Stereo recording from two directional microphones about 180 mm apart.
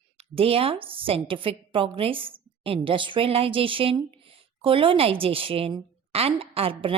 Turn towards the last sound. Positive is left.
turn(degrees=-30)  # may be behind; listen again after turning